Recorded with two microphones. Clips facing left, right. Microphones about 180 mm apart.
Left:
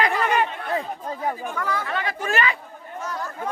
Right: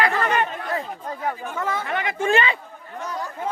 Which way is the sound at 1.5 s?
25° right (ahead or behind).